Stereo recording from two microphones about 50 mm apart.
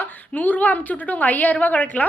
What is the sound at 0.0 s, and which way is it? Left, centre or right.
A woman's voice, left.